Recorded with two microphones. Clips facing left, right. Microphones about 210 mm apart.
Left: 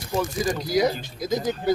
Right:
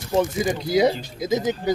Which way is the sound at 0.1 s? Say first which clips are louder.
Right 4 dB; 20° right (ahead or behind).